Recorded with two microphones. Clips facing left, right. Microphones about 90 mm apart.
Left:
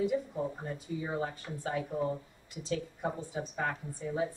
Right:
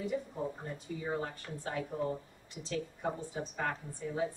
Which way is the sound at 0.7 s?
25° left (ahead or behind).